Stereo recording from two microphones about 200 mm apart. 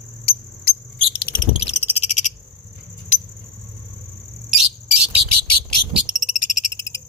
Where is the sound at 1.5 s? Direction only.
30° left (ahead or behind).